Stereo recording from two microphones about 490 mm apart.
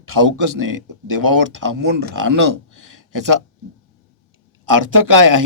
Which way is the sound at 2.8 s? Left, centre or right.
Right.